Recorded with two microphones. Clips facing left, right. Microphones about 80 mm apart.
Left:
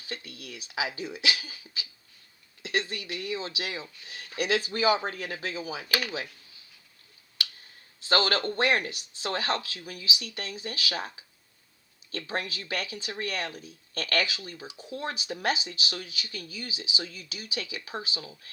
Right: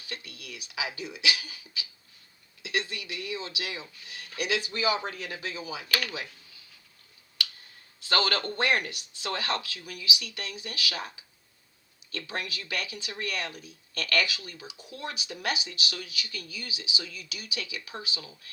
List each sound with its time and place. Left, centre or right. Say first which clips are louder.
0.0 s speech: left 2 dB; left
5.9 s speech: left 1 dB; centre
8.0 s speech: left 2 dB; left
12.1 s speech: left 2 dB; left